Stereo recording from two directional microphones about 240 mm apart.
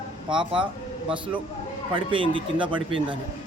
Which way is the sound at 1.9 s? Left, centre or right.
Right.